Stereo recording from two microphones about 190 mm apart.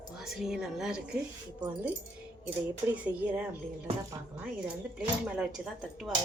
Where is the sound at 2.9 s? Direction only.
5° right (ahead or behind).